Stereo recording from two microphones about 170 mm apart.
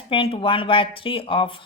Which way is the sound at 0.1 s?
30° left (ahead or behind).